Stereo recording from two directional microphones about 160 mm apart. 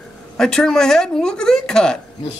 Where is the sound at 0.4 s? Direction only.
5° left (ahead or behind).